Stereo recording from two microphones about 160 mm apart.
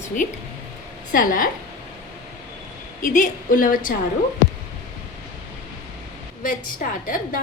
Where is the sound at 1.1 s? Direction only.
60° left (ahead or behind).